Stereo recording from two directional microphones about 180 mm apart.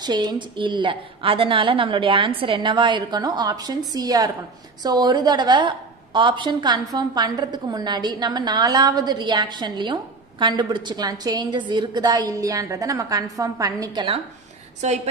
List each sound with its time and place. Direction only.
0.0 s a woman's voice: 25° right (ahead or behind)
14.8 s a woman's voice: 40° right (ahead or behind)